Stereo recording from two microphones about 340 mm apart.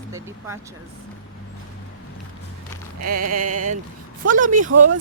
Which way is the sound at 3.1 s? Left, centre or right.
Right.